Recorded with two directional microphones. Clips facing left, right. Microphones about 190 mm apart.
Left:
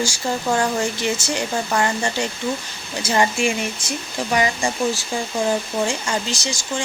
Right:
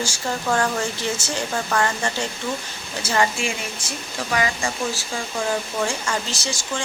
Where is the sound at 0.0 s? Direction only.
15° left (ahead or behind).